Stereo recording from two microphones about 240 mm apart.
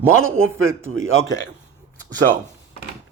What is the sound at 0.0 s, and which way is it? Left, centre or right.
Speech, centre.